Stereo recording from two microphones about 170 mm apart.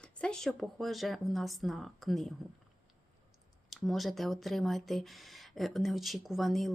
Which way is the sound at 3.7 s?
Centre (ahead or behind).